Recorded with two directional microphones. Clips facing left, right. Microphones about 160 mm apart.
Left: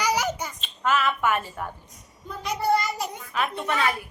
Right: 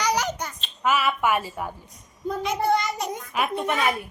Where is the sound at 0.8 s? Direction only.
10° right (ahead or behind).